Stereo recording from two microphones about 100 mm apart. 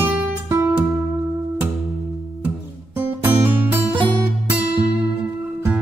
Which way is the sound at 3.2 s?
20° right (ahead or behind).